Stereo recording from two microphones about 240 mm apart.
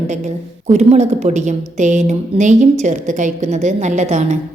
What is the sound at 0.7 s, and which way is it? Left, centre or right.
A woman's voice, right.